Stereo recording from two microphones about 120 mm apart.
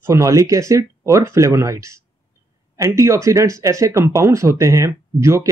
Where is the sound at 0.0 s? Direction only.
25° right (ahead or behind).